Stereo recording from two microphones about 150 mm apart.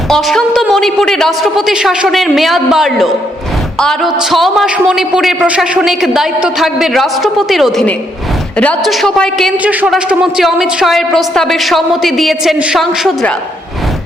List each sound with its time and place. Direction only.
0.1 s a man's voice: centre (ahead or behind)